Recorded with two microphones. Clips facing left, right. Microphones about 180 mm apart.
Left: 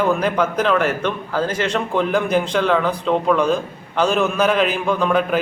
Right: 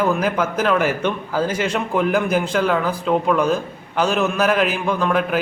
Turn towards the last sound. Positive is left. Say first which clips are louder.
# left 1 dB
turn(degrees=0)  # may be behind; listen again after turning